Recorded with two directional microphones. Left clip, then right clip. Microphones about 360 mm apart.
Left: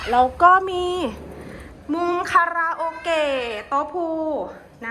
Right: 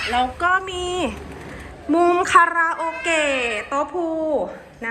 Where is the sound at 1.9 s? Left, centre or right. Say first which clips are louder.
Right 5 dB; centre.